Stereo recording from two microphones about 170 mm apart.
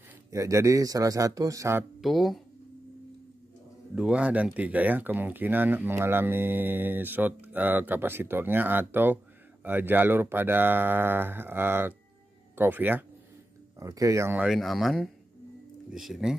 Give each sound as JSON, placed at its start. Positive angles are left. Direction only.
{"t": 0.3, "sound": "speech", "side_deg": -20}
{"t": 2.0, "sound": "speech", "side_deg": 0}
{"t": 3.9, "sound": "speech", "side_deg": -5}